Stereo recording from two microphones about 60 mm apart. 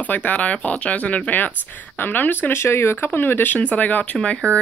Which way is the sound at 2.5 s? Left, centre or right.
Left.